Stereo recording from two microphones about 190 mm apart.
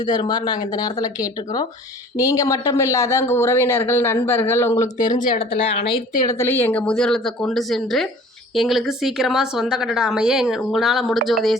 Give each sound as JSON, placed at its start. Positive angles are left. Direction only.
{"t": 0.0, "sound": "speech", "side_deg": 20}
{"t": 6.2, "sound": "a woman's voice", "side_deg": 10}